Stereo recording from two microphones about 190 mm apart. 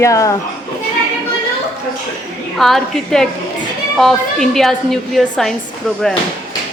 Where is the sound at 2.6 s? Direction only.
Centre (ahead or behind).